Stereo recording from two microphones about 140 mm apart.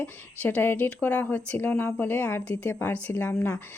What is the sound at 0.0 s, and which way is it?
A woman's voice, 10° left (ahead or behind).